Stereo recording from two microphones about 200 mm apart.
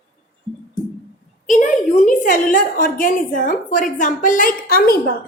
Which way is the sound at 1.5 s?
40° left (ahead or behind).